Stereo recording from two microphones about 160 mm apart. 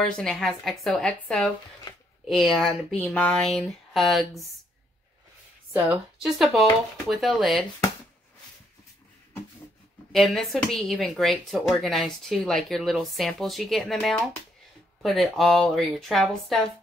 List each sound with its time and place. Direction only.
0.2 s a woman's voice: centre (ahead or behind)
1.9 s a sound: 25° left (ahead or behind)
2.2 s a woman's voice: centre (ahead or behind)
5.7 s a woman's voice: 5° right (ahead or behind)
10.1 s a woman's voice: centre (ahead or behind)